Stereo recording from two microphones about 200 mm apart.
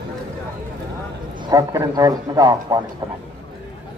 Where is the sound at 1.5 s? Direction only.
15° right (ahead or behind).